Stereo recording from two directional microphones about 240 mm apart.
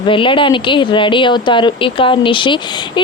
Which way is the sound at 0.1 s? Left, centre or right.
Left.